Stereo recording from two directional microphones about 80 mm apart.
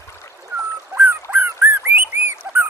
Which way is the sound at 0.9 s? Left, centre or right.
Right.